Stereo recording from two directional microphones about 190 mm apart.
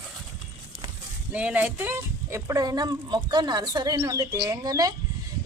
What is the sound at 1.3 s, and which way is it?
A woman's voice, 5° right (ahead or behind).